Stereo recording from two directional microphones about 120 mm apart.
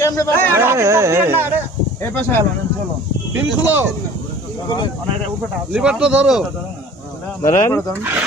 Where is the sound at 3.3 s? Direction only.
15° right (ahead or behind).